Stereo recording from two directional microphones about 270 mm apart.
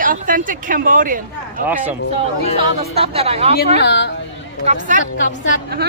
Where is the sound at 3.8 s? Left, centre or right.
Left.